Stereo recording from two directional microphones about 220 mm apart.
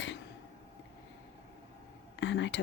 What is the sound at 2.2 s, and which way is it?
Speech, 55° left (ahead or behind).